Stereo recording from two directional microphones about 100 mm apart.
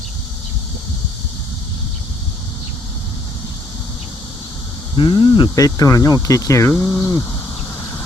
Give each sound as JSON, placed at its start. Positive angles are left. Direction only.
{"t": 4.9, "sound": "speech", "side_deg": 50}
{"t": 5.5, "sound": "speech", "side_deg": 35}